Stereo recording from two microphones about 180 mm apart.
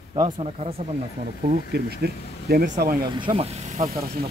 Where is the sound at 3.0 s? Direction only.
25° right (ahead or behind).